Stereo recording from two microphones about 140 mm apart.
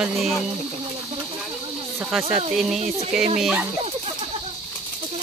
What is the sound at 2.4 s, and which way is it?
Speech, 50° right (ahead or behind).